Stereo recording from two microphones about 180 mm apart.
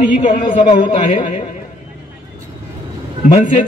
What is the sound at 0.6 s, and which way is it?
Speech, 25° left (ahead or behind).